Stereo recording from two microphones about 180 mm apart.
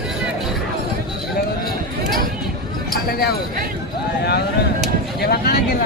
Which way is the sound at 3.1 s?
60° left (ahead or behind).